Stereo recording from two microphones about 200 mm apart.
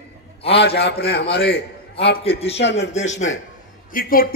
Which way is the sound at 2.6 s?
60° left (ahead or behind).